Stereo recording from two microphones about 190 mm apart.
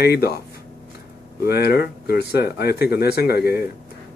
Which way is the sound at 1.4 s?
55° left (ahead or behind).